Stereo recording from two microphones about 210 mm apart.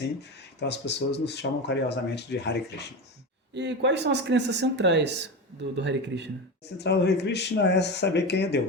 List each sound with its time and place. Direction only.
0.2 s speech: 55° left (ahead or behind)
3.5 s speech: 55° right (ahead or behind)
6.7 s speech: 55° left (ahead or behind)